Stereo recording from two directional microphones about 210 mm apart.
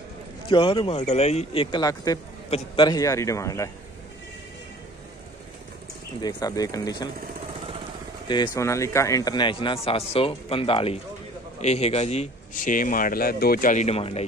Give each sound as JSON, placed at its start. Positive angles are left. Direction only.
{"t": 0.5, "sound": "a man's voice", "side_deg": 25}
{"t": 6.2, "sound": "a man's voice", "side_deg": 15}
{"t": 8.3, "sound": "a man's voice", "side_deg": 15}